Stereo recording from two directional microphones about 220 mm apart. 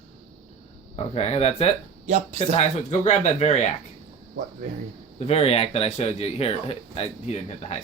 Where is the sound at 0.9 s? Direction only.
25° left (ahead or behind).